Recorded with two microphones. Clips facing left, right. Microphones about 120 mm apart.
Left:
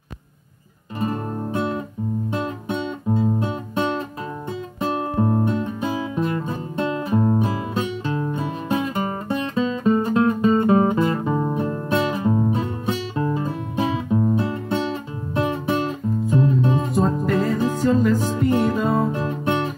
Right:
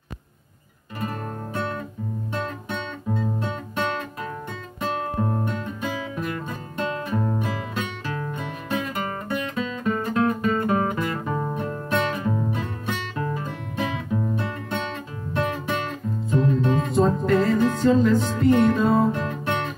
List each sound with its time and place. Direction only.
0.9 s music: 25° left (ahead or behind)
3.1 s music: 15° left (ahead or behind)
4.8 s guitar: 25° left (ahead or behind)
13.8 s music: 30° left (ahead or behind)
16.3 s music: 20° left (ahead or behind)
16.9 s music: 5° left (ahead or behind)
19.1 s music: 20° left (ahead or behind)